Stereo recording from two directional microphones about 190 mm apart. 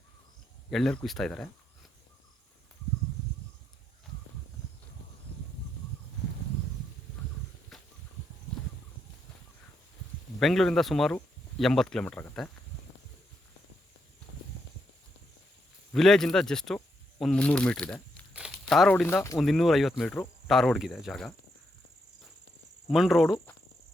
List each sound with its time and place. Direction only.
0.7 s speech: centre (ahead or behind)
7.7 s a sound: centre (ahead or behind)
10.4 s speech: centre (ahead or behind)
15.9 s speech: centre (ahead or behind)
19.4 s speech: centre (ahead or behind)
22.9 s speech: centre (ahead or behind)